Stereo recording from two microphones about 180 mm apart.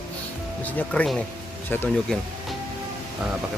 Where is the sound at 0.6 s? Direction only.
5° left (ahead or behind).